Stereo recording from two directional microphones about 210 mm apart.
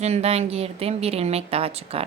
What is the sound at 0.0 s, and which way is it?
A woman's voice, 30° right (ahead or behind).